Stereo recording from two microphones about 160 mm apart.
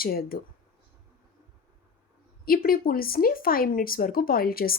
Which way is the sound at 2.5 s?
65° left (ahead or behind).